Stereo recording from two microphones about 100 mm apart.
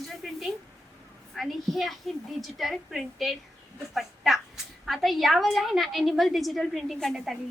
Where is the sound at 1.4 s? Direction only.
Centre (ahead or behind).